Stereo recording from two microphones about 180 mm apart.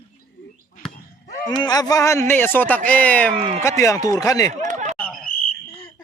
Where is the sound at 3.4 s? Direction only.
35° right (ahead or behind).